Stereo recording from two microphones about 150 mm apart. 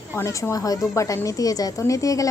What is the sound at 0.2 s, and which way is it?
A woman's voice, 20° left (ahead or behind).